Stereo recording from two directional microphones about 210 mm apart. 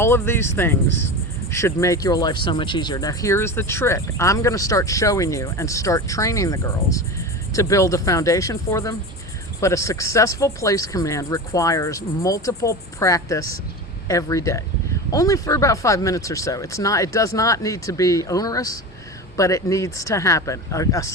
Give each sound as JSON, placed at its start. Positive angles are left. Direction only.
{"t": 0.0, "sound": "speech", "side_deg": 10}